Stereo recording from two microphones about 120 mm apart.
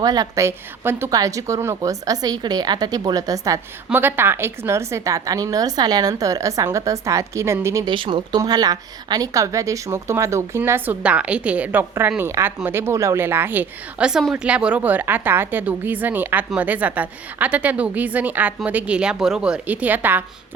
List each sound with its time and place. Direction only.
0.0 s a woman's voice: 30° right (ahead or behind)
3.9 s a woman's voice: 20° right (ahead or behind)
7.9 s a woman's voice: 40° right (ahead or behind); by 20.2 s 15° right (ahead or behind)